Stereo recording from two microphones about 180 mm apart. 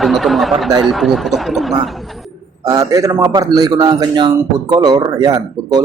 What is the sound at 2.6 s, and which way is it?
A man's voice, 20° right (ahead or behind).